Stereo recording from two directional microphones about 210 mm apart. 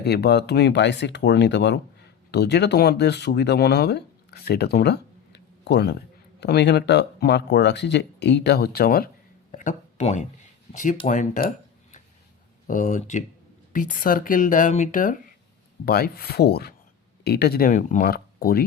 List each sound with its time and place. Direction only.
0.0 s speech: 50° left (ahead or behind)